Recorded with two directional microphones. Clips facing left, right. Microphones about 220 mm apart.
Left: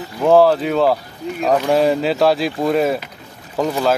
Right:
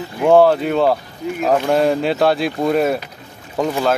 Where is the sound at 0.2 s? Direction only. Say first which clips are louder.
Even; centre (ahead or behind).